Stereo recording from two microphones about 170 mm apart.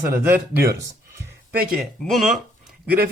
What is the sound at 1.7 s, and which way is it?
Speech, centre (ahead or behind).